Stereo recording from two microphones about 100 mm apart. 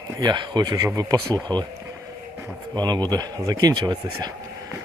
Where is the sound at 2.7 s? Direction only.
45° right (ahead or behind).